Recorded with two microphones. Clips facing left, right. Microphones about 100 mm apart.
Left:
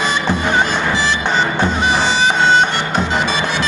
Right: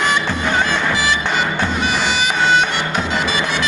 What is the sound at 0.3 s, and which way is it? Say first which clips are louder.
Music: left 2 dB; 20° left (ahead or behind).